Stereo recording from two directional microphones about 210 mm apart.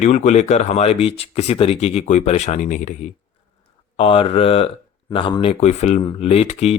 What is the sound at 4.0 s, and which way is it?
Speech, 25° left (ahead or behind).